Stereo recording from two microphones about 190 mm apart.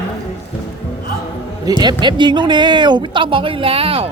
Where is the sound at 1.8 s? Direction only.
25° right (ahead or behind).